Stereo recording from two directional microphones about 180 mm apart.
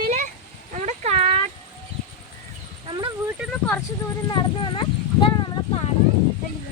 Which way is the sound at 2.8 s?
25° right (ahead or behind).